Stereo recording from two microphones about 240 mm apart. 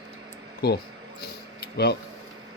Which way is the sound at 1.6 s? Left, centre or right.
Left.